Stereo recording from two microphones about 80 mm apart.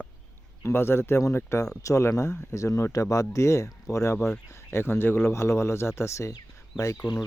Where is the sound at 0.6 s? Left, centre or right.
Left.